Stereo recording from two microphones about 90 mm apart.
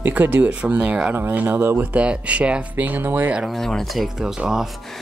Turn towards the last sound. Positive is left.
turn(degrees=-5)  # may be behind; listen again after turning